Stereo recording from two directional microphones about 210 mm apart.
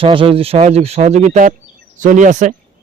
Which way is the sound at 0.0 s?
25° right (ahead or behind).